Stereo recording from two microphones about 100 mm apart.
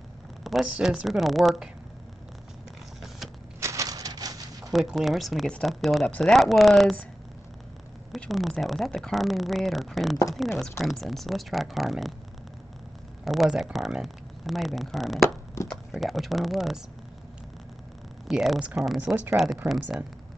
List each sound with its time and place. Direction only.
0.4 s speech: centre (ahead or behind)
3.6 s a sound: 35° right (ahead or behind)
4.7 s speech: centre (ahead or behind)
8.3 s speech: centre (ahead or behind)
13.2 s speech: centre (ahead or behind)
15.2 s crushing: 30° left (ahead or behind)
15.9 s speech: centre (ahead or behind)
18.3 s speech: 5° right (ahead or behind)
19.3 s speech: centre (ahead or behind)